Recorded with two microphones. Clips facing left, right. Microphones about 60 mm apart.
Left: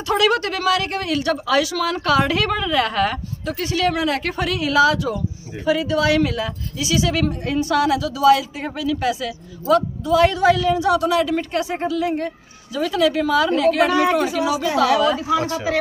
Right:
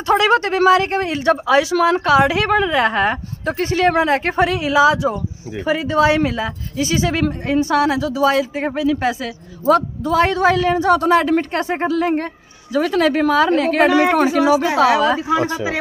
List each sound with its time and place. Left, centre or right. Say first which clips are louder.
0.0 s speech: right 4 dB; right
3.4 s speech: right 4 dB; right
5.7 s speech: right 2 dB; right